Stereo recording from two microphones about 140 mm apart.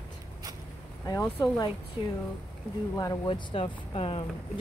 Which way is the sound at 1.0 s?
25° left (ahead or behind).